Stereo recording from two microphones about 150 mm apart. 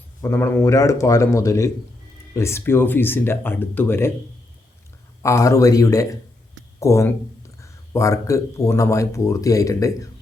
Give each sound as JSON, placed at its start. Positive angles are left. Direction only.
{"t": 0.2, "sound": "a man's voice", "side_deg": 15}
{"t": 5.2, "sound": "a man's voice", "side_deg": 20}